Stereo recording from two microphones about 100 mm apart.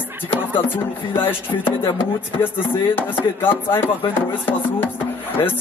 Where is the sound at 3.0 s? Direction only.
20° left (ahead or behind).